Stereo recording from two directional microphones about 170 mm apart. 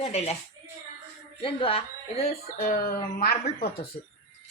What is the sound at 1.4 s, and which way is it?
Speech, 30° left (ahead or behind).